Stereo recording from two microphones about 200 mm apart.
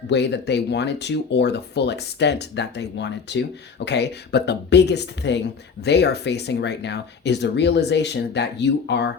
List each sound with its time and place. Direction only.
0.1 s speech: 60° left (ahead or behind)